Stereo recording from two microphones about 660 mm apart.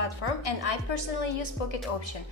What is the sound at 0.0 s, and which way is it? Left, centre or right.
A woman's voice, left.